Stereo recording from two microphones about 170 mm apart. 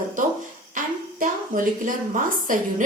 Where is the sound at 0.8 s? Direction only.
55° right (ahead or behind).